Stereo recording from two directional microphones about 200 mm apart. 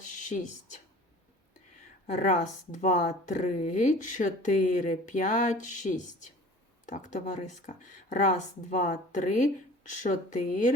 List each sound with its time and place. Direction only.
0.3 s speech: 40° left (ahead or behind)
2.0 s speech: 35° left (ahead or behind)